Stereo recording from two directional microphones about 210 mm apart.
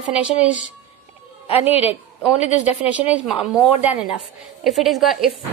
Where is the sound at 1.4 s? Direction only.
30° left (ahead or behind).